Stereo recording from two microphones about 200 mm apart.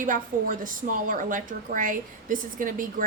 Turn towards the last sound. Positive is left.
turn(degrees=-45)  # may be behind; listen again after turning